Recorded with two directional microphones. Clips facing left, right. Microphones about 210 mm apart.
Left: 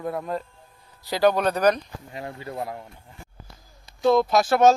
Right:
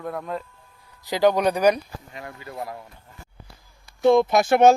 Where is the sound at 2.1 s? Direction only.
30° left (ahead or behind).